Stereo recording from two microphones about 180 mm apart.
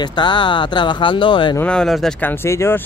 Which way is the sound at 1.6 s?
5° left (ahead or behind).